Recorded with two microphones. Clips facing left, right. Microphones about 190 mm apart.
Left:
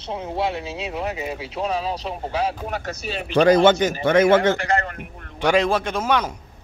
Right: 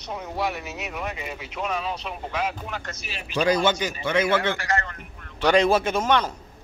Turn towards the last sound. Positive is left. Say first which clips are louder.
# left 1 dB
turn(degrees=10)  # may be behind; listen again after turning